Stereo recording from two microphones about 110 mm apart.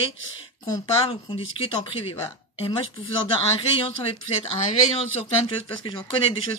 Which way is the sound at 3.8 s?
60° left (ahead or behind).